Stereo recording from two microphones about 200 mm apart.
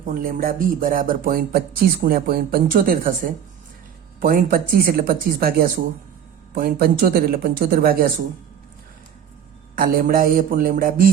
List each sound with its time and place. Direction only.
0.1 s speech: 45° right (ahead or behind)
9.7 s speech: 45° right (ahead or behind)